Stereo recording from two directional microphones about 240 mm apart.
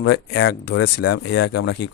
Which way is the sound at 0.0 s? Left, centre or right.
Left.